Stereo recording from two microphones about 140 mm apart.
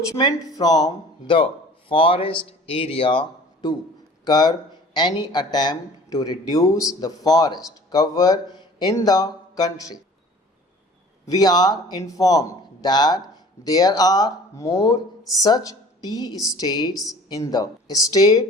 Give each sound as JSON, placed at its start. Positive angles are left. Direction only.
{"t": 0.1, "sound": "speech", "side_deg": 30}
{"t": 11.3, "sound": "speech", "side_deg": 30}